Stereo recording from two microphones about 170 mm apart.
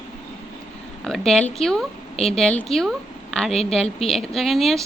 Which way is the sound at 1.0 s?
Centre (ahead or behind).